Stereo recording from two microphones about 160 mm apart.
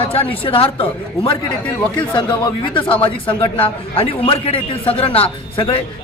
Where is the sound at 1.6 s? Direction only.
10° left (ahead or behind).